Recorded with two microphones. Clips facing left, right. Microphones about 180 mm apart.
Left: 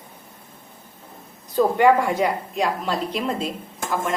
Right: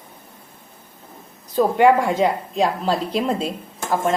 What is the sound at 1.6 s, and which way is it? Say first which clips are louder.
A woman's voice: right 1 dB; 20° right (ahead or behind).